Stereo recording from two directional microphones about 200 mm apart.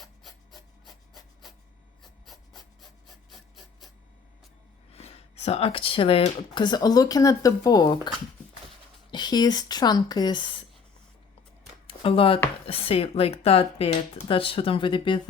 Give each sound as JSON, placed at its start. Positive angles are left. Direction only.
{"t": 0.0, "sound": "filing", "side_deg": 0}
{"t": 4.9, "sound": "speech", "side_deg": 30}
{"t": 11.9, "sound": "a sound", "side_deg": 25}
{"t": 12.6, "sound": "speech", "side_deg": 30}